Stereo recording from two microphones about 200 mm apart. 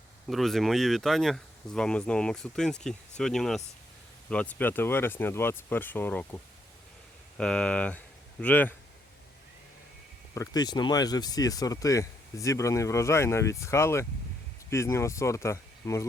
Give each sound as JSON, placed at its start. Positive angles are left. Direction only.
{"t": 0.3, "sound": "speech", "side_deg": 0}
{"t": 7.3, "sound": "speech", "side_deg": 5}
{"t": 10.3, "sound": "speech", "side_deg": 15}